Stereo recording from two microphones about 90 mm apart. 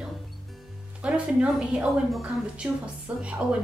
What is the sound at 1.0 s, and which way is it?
A woman's voice, 15° right (ahead or behind).